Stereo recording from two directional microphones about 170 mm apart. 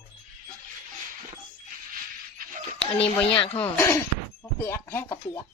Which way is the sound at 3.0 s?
35° left (ahead or behind).